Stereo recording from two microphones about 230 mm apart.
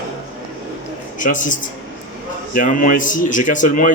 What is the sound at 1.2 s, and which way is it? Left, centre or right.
Speech, left.